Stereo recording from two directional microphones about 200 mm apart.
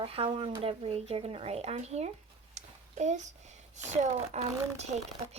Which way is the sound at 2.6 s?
35° right (ahead or behind).